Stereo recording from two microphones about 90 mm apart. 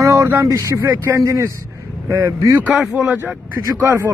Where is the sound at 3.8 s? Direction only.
30° right (ahead or behind).